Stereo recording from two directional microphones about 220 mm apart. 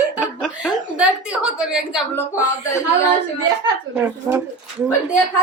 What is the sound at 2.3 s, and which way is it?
Speech, 10° left (ahead or behind).